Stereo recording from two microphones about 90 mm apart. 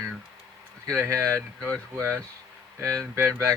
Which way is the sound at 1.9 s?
25° right (ahead or behind).